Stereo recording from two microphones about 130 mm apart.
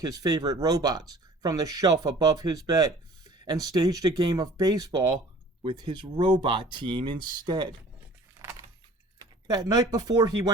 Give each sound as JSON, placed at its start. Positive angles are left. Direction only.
{"t": 0.0, "sound": "speech", "side_deg": -30}
{"t": 8.4, "sound": "keys jangling", "side_deg": -30}
{"t": 9.1, "sound": "speech", "side_deg": -30}